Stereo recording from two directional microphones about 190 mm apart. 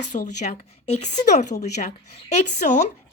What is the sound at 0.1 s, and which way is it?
A woman's voice, 40° left (ahead or behind).